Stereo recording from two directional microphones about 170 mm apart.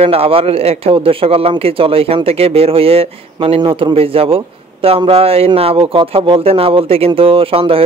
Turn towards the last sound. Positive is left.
turn(degrees=-35)  # may be behind; listen again after turning